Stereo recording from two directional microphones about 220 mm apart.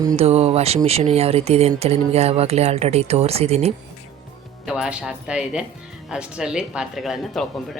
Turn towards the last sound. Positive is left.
turn(degrees=0)  # may be behind; listen again after turning